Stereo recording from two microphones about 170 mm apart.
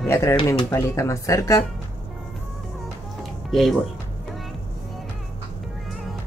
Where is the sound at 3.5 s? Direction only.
Centre (ahead or behind).